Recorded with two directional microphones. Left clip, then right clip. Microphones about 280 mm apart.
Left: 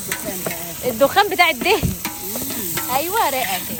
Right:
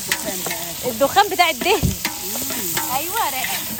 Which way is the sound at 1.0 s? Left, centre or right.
Centre.